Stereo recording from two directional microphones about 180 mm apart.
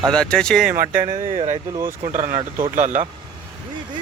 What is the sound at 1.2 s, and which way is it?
Speech, 40° right (ahead or behind).